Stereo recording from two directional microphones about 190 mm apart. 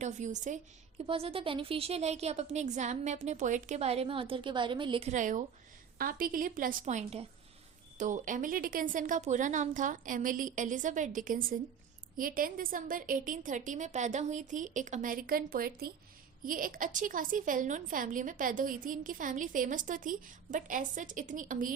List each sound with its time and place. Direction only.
0.0 s a woman's voice: 40° right (ahead or behind)
1.0 s a woman's voice: 30° right (ahead or behind)